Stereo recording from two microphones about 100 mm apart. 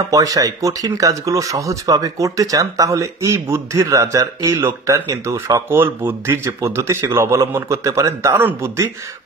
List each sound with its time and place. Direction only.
0.1 s a man's voice: 35° right (ahead or behind)